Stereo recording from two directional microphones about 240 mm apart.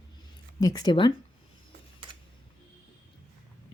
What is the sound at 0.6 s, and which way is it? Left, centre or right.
Speech, centre.